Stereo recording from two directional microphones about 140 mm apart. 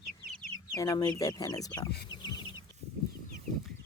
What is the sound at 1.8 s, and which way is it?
Chicken, 30° left (ahead or behind).